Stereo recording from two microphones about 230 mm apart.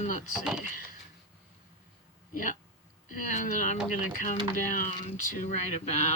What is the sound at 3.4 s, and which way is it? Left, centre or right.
Speech, left.